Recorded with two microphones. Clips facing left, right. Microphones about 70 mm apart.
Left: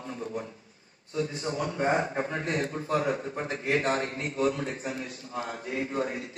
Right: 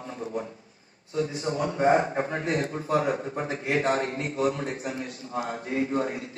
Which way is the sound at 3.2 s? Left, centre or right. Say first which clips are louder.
Right 1 dB; right.